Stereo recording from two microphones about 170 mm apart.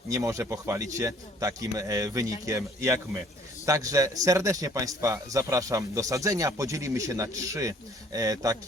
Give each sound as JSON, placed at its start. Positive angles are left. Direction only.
{"t": 0.1, "sound": "a man's voice", "side_deg": -20}